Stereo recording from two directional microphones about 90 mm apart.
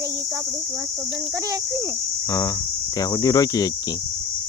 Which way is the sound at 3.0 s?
45° left (ahead or behind).